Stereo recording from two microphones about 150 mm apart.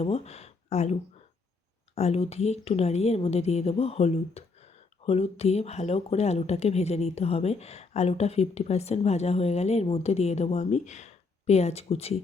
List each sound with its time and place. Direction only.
0.0 s speech: 45° left (ahead or behind)
2.0 s a woman's voice: 45° left (ahead or behind)